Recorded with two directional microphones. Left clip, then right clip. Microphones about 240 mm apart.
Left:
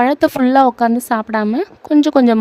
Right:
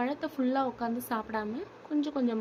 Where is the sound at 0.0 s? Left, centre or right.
Left.